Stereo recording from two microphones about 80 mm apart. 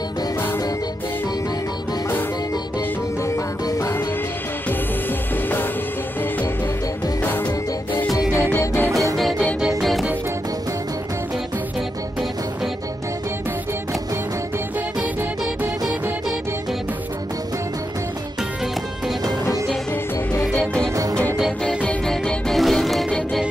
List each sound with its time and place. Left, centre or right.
3.3 s music: left
8.5 s music: left
9.1 s music: centre
20.5 s music: centre
20.9 s music: right
21.6 s music: centre